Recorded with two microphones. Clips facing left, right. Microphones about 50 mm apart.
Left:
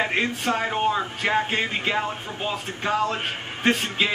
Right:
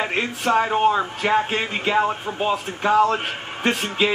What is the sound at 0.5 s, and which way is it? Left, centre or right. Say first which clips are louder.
Speech: right 7 dB; centre.